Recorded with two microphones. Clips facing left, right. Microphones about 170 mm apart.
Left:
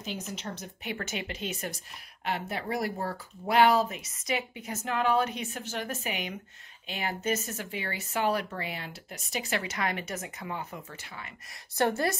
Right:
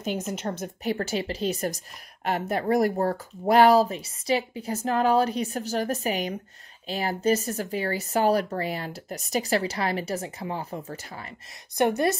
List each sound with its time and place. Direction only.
0.0 s speech: 50° right (ahead or behind)
11.7 s a woman's voice: 15° right (ahead or behind)